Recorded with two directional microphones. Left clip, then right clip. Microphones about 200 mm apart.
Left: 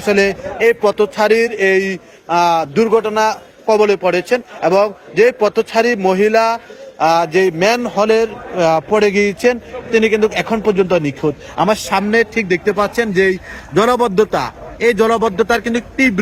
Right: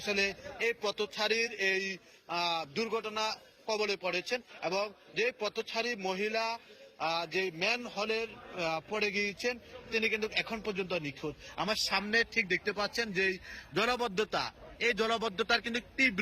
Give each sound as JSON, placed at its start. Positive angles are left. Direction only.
{"t": 0.0, "sound": "a man's voice", "side_deg": 30}